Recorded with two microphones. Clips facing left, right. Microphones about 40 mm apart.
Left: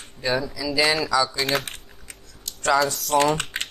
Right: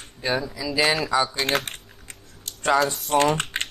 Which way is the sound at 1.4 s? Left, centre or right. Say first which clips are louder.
Even; right.